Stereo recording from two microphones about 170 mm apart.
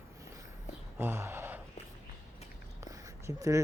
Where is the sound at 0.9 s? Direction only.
15° right (ahead or behind).